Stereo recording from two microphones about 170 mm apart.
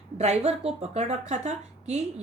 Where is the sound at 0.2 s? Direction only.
40° right (ahead or behind).